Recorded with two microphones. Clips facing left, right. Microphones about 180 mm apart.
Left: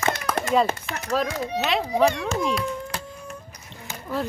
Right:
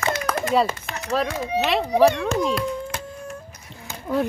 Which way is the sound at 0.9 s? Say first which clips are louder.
Even; 50° right (ahead or behind).